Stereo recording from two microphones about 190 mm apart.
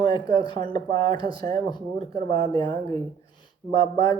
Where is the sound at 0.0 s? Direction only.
20° left (ahead or behind).